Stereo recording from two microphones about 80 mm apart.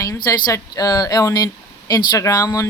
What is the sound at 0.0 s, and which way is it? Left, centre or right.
Speech, left.